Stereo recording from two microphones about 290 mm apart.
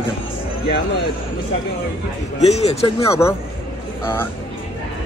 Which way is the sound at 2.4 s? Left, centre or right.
Left.